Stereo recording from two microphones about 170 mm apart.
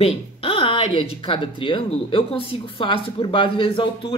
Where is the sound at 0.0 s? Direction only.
35° left (ahead or behind).